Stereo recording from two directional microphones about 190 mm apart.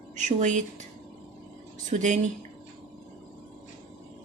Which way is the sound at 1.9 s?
40° right (ahead or behind).